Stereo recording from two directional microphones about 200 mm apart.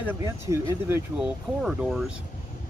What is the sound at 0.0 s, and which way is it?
Speech, 10° right (ahead or behind).